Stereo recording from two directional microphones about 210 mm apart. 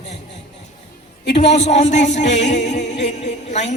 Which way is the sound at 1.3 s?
30° left (ahead or behind).